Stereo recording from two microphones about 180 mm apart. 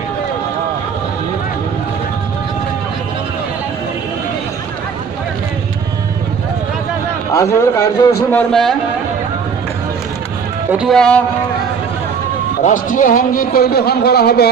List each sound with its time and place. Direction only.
7.3 s a man's voice: 15° left (ahead or behind)
8.3 s a man's voice: 5° left (ahead or behind)
10.7 s a man's voice: 5° right (ahead or behind)
12.6 s a man's voice: 45° left (ahead or behind); by 14.5 s 60° left (ahead or behind)